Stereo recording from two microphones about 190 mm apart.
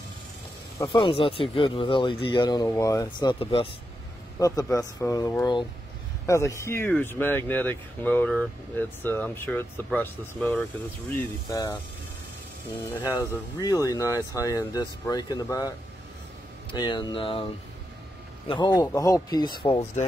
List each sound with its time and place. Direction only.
0.7 s speech: 20° left (ahead or behind)
11.1 s speech: 20° left (ahead or behind)
13.6 s speech: 20° left (ahead or behind)
16.7 s speech: 20° left (ahead or behind)
18.5 s speech: 20° left (ahead or behind)